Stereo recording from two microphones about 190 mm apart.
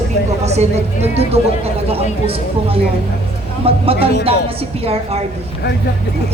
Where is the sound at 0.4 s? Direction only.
35° right (ahead or behind).